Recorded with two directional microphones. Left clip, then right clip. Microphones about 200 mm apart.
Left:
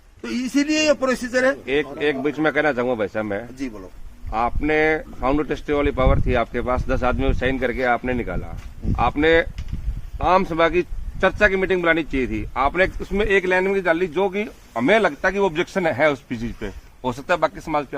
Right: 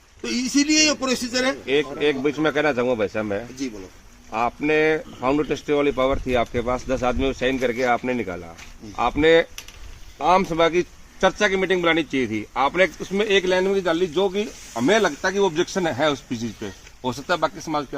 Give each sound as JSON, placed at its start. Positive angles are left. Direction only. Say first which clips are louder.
{"t": 0.3, "sound": "a man's voice", "louder": "right 1 dB", "side_deg": 40}
{"t": 1.6, "sound": "speech", "louder": "right 1 dB", "side_deg": -20}